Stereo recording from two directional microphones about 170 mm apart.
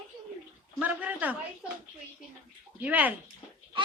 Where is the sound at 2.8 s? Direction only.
10° right (ahead or behind).